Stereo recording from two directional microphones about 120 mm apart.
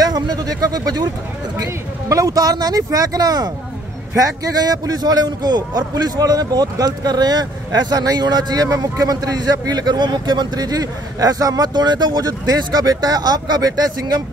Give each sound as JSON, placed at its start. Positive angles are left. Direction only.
{"t": 0.0, "sound": "a man's voice", "side_deg": -35}